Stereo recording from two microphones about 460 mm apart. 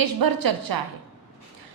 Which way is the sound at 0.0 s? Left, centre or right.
Right.